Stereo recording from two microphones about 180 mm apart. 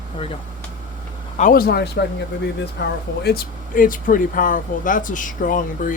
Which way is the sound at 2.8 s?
75° left (ahead or behind).